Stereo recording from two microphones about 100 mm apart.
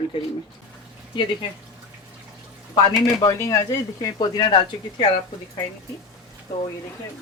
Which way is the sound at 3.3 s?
30° left (ahead or behind).